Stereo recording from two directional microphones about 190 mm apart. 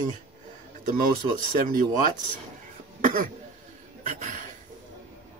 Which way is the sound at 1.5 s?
45° right (ahead or behind).